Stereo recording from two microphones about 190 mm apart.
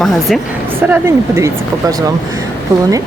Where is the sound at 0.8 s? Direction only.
15° right (ahead or behind).